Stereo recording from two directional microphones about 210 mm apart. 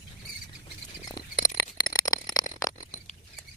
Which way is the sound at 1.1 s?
20° left (ahead or behind).